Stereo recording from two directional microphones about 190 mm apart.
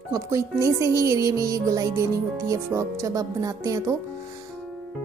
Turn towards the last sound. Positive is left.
turn(degrees=-15)  # may be behind; listen again after turning